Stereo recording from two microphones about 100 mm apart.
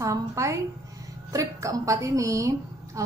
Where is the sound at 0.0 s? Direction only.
30° right (ahead or behind).